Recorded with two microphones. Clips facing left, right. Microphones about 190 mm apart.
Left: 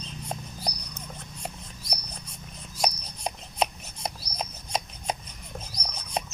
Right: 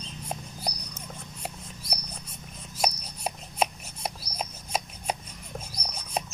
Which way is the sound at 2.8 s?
5° right (ahead or behind).